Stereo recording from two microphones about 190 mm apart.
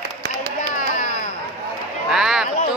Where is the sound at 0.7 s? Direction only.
45° left (ahead or behind).